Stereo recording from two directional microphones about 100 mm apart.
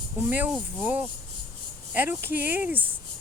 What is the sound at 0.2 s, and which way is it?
Speech, 20° right (ahead or behind).